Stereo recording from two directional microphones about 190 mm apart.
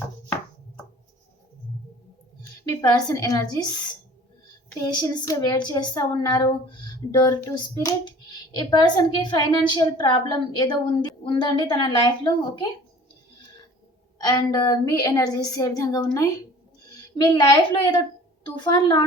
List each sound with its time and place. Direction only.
2.6 s speech: 20° left (ahead or behind)
4.9 s speech: 15° left (ahead or behind)
14.2 s a woman's voice: 20° left (ahead or behind)